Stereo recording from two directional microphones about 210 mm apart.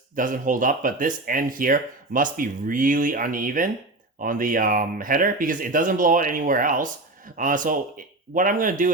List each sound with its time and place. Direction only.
0.2 s speech: 40° right (ahead or behind)